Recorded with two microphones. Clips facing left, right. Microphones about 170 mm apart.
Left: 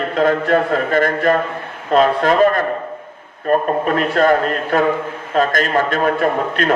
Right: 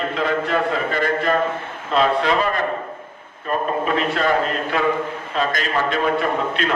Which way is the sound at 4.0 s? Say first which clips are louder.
Left 6 dB; 45° left (ahead or behind).